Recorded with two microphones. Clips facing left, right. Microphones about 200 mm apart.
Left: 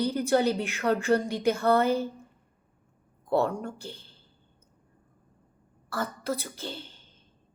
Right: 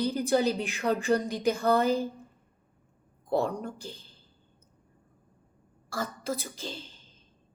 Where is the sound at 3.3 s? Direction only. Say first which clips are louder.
Left 2 dB; 15° right (ahead or behind).